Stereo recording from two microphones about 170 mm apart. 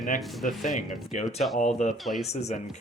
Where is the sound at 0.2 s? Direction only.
Centre (ahead or behind).